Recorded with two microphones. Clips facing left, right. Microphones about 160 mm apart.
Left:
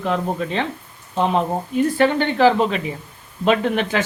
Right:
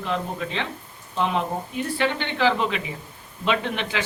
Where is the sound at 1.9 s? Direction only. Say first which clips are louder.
Left 5 dB; 45° left (ahead or behind).